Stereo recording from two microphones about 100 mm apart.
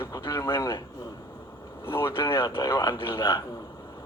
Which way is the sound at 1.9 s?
25° left (ahead or behind).